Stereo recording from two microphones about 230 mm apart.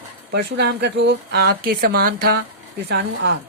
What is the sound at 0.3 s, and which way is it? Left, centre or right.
Speech, right.